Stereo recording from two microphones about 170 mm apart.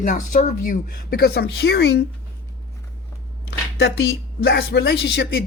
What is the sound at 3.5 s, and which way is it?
A woman's voice, 75° left (ahead or behind).